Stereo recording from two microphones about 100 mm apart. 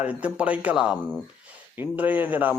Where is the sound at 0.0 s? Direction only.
15° right (ahead or behind).